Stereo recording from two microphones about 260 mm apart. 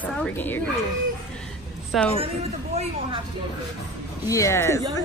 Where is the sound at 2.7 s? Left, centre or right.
Right.